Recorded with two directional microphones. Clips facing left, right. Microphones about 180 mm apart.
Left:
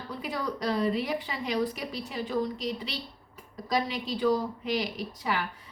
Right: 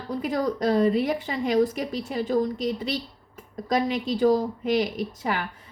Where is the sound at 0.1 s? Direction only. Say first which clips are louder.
Right 8 dB; 45° right (ahead or behind).